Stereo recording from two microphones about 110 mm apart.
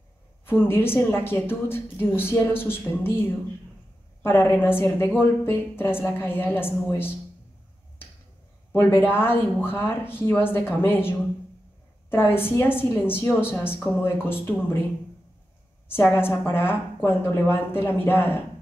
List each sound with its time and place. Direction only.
0.5 s a woman's voice: 20° left (ahead or behind)
8.7 s a woman's voice: 20° left (ahead or behind)
15.9 s a woman's voice: 20° left (ahead or behind)